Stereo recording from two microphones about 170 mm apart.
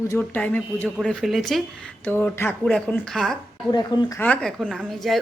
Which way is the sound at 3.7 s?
25° left (ahead or behind).